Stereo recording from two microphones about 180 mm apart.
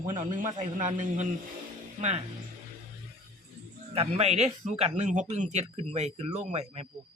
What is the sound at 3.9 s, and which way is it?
Speech, 35° right (ahead or behind).